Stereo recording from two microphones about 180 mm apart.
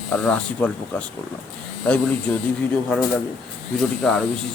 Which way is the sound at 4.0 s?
Centre (ahead or behind).